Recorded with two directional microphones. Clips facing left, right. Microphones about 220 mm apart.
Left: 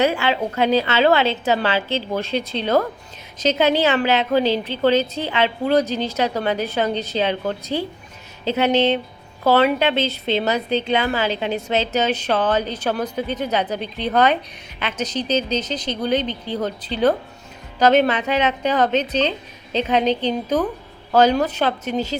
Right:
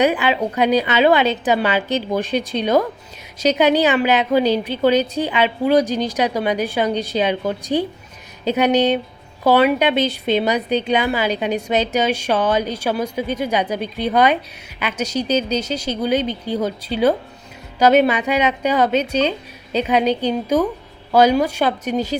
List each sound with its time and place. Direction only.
0.0 s a woman's voice: 15° right (ahead or behind)